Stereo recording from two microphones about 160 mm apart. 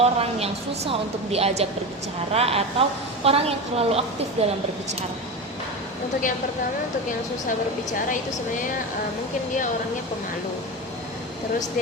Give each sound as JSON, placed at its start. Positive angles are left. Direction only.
{"t": 0.0, "sound": "a woman's voice", "side_deg": -40}